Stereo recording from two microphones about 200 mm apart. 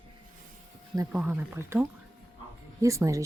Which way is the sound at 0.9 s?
10° right (ahead or behind).